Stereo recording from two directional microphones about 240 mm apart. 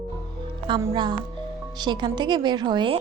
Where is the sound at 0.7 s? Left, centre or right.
Centre.